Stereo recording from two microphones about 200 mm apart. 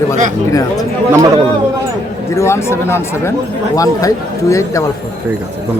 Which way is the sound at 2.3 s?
15° left (ahead or behind).